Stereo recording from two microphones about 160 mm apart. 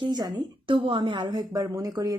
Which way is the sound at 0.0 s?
25° right (ahead or behind).